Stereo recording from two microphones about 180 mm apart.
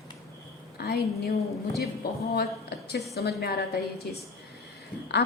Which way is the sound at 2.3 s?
65° left (ahead or behind).